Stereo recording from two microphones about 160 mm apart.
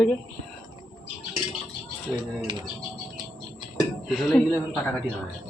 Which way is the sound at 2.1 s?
Centre (ahead or behind).